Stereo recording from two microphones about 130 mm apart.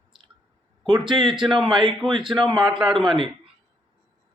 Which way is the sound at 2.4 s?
35° right (ahead or behind).